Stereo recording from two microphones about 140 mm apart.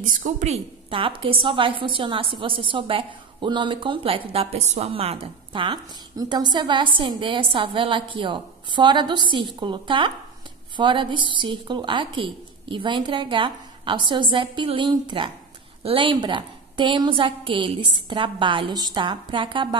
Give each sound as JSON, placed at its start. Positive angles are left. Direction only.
{"t": 0.0, "sound": "a woman's voice", "side_deg": -70}
{"t": 0.5, "sound": "a woman's voice", "side_deg": -40}